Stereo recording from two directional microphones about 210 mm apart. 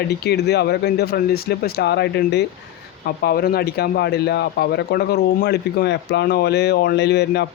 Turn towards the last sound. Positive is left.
turn(degrees=50)  # may be behind; listen again after turning